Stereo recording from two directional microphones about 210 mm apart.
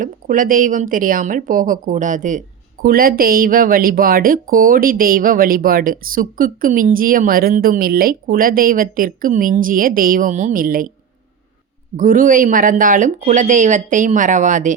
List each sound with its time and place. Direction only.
0.0 s speech: 40° right (ahead or behind)
11.9 s speech: 40° right (ahead or behind)